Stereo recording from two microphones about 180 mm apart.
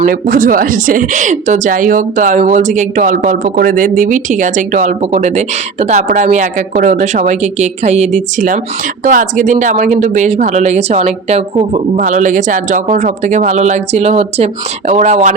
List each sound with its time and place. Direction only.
0.0 s a woman's voice: 50° right (ahead or behind)